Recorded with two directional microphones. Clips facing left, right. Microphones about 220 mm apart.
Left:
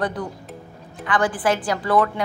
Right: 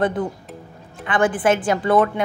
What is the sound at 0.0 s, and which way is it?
A woman's voice, 25° right (ahead or behind).